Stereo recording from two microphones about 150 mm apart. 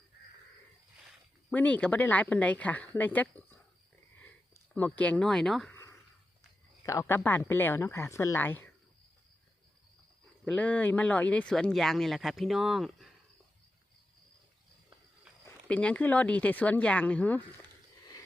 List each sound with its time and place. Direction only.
1.5 s speech: 10° left (ahead or behind)
4.7 s speech: 10° left (ahead or behind)
5.7 s a sound: 20° left (ahead or behind)
6.8 s speech: 20° left (ahead or behind)
10.4 s speech: 10° left (ahead or behind)
15.6 s speech: 5° left (ahead or behind)